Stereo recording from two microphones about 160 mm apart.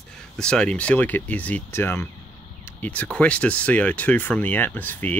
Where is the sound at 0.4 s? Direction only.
5° left (ahead or behind).